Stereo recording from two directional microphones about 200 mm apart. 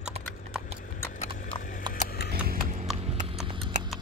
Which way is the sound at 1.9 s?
50° left (ahead or behind).